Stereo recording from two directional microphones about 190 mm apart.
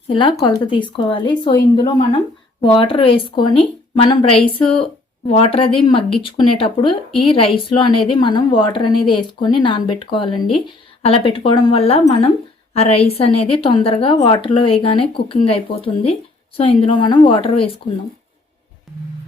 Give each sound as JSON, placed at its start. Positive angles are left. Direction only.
{"t": 0.1, "sound": "speech", "side_deg": 25}
{"t": 18.9, "sound": "music", "side_deg": 0}